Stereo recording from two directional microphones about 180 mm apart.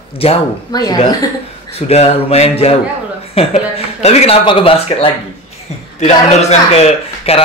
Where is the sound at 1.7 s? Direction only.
35° left (ahead or behind).